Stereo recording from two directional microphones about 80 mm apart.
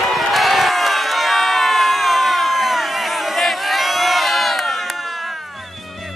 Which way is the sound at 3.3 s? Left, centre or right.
Centre.